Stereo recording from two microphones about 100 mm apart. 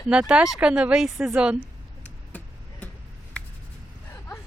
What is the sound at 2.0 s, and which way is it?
Vehicle, 15° left (ahead or behind).